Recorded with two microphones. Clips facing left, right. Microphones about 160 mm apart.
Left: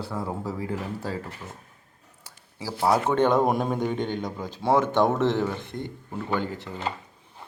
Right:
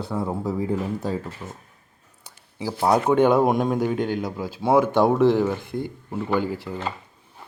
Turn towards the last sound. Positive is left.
turn(degrees=-10)  # may be behind; listen again after turning